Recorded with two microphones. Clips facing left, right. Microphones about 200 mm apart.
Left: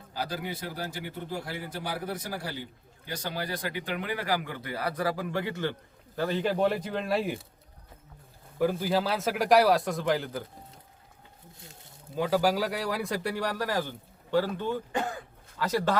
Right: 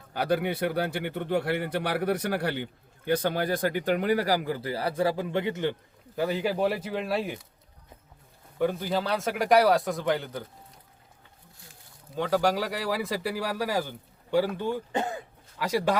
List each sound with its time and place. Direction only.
0.1 s speech: 60° right (ahead or behind); by 7.3 s centre (ahead or behind)
8.5 s speech: 5° left (ahead or behind)
12.1 s speech: 5° left (ahead or behind); by 16.0 s 10° right (ahead or behind)